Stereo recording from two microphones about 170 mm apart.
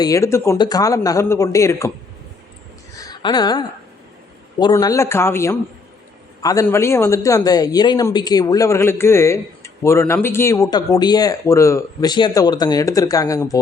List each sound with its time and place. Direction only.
0.0 s speech: 20° left (ahead or behind)
2.9 s a sound: 20° left (ahead or behind)
4.6 s speech: 20° left (ahead or behind)